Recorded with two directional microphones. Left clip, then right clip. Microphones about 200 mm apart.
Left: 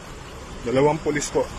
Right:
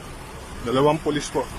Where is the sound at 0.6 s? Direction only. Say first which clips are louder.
Even; centre (ahead or behind).